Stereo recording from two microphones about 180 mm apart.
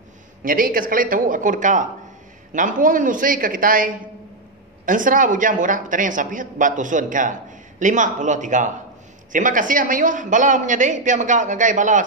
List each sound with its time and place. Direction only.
0.4 s a man's voice: 50° right (ahead or behind)